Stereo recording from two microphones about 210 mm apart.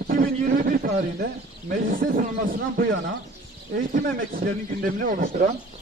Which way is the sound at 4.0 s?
45° right (ahead or behind).